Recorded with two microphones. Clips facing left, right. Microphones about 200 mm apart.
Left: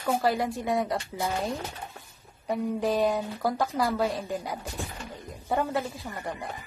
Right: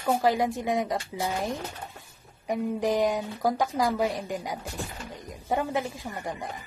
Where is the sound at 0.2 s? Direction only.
15° right (ahead or behind).